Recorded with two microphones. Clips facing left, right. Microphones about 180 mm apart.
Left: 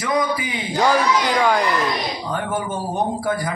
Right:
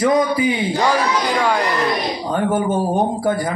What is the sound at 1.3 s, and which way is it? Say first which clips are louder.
Speech: even; centre (ahead or behind).